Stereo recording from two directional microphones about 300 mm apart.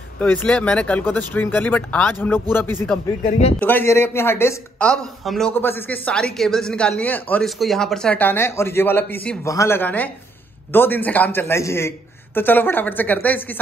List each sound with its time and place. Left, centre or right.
0.2 s a man's voice: centre
3.3 s speech: left
3.5 s a man's voice: centre